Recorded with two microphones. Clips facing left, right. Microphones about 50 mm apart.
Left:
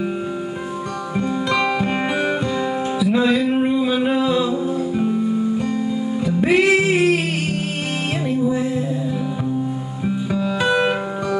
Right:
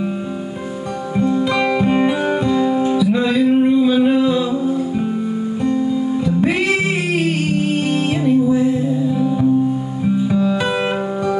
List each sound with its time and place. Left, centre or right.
1.1 s music: centre
1.4 s music: centre
5.9 s music: centre